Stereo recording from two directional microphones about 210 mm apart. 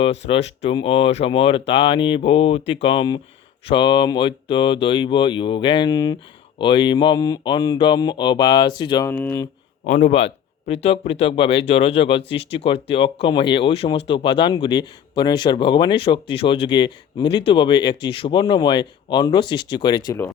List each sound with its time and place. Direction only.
0.3 s speech: 30° left (ahead or behind); by 9.5 s 10° left (ahead or behind)
9.8 s speech: 30° left (ahead or behind); by 20.3 s 15° left (ahead or behind)